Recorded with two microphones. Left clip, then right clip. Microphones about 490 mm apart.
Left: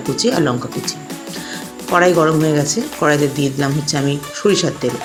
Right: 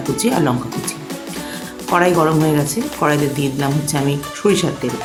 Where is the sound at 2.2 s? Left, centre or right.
Right.